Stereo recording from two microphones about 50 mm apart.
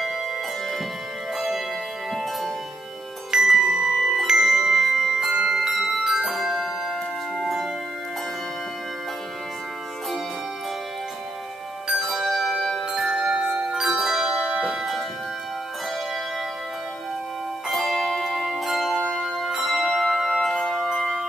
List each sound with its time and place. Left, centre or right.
1.3 s music: centre
3.3 s music: centre
11.9 s music: centre
12.9 s music: centre
13.2 s music: right
13.7 s music: centre
17.6 s music: centre
18.2 s bell: centre
20.4 s music: centre